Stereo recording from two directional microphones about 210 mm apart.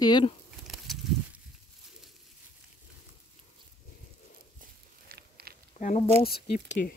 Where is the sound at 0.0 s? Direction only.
20° left (ahead or behind).